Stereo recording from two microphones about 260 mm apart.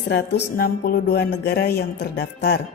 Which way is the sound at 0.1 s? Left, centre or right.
Left.